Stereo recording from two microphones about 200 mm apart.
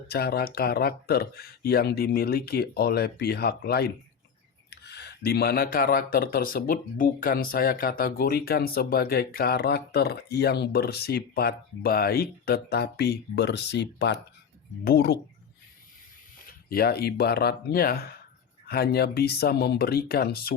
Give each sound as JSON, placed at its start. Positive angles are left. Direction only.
{"t": 0.1, "sound": "speech", "side_deg": 50}
{"t": 16.5, "sound": "speech", "side_deg": 50}